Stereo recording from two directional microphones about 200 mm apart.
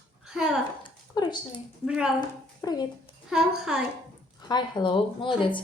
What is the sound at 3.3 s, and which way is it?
Speech, 5° right (ahead or behind).